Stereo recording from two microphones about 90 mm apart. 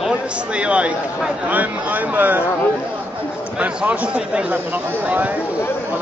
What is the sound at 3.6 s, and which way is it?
Speech, 15° right (ahead or behind).